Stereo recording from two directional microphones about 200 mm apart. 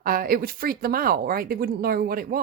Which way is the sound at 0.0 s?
45° right (ahead or behind).